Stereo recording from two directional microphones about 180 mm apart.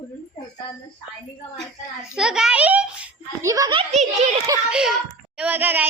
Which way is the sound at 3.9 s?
40° right (ahead or behind).